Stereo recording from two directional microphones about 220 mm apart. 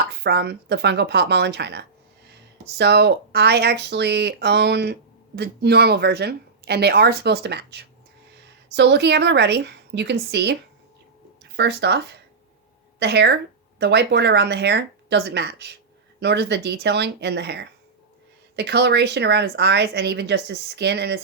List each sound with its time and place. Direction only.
0.2 s speech: 50° right (ahead or behind)